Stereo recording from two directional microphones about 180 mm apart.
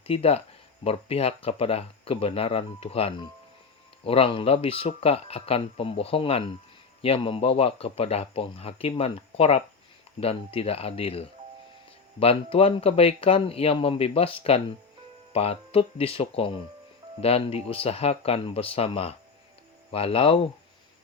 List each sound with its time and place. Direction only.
0.0 s speech: 30° left (ahead or behind)